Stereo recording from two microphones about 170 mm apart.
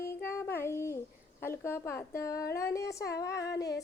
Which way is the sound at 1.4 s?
15° left (ahead or behind).